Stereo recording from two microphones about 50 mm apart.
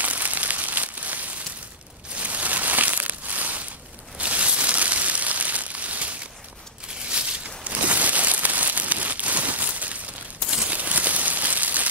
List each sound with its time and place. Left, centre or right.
0.0 s crumpling: right
2.1 s a sound: right
10.5 s crumpling: right